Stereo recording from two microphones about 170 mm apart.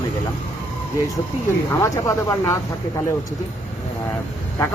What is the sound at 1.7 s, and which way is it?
Speech, 15° left (ahead or behind).